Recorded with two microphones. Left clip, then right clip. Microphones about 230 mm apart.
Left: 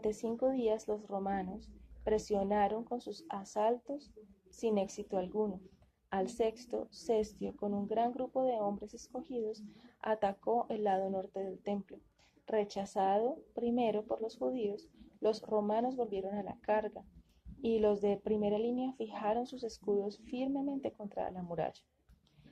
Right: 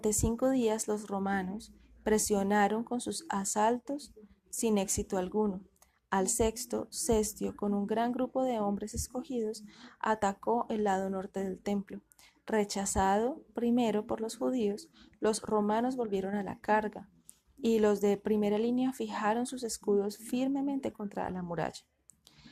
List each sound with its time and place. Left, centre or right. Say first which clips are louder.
0.0 s a woman's voice: right 3 dB; right